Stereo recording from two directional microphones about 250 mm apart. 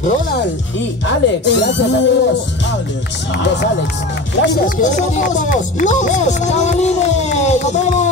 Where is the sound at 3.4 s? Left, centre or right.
Left.